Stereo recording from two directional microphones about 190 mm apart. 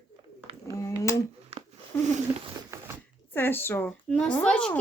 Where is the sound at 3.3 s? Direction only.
10° left (ahead or behind).